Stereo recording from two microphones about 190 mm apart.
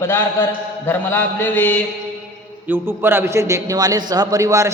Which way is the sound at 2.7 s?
10° right (ahead or behind).